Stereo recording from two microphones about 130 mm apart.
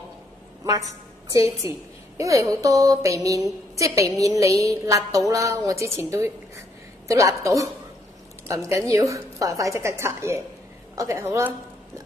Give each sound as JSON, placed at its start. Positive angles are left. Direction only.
{"t": 1.3, "sound": "a woman's voice", "side_deg": -25}